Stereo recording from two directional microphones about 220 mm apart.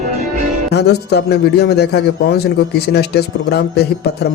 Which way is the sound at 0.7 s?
50° left (ahead or behind).